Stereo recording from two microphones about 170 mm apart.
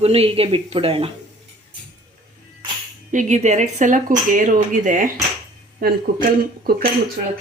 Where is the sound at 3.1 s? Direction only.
45° right (ahead or behind); by 6.9 s 60° right (ahead or behind).